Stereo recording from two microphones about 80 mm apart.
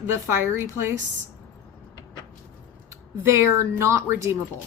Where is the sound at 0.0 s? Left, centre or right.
Right.